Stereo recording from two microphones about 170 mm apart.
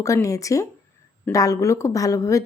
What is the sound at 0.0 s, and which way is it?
A woman's voice, 20° left (ahead or behind).